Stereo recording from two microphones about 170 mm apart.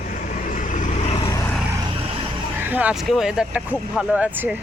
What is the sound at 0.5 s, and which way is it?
Vehicle, 50° left (ahead or behind).